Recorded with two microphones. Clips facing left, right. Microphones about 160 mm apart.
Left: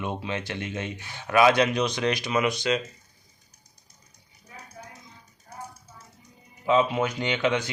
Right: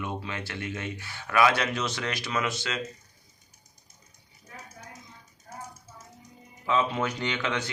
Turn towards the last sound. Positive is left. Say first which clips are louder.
# left 5 dB
turn(degrees=15)  # may be behind; listen again after turning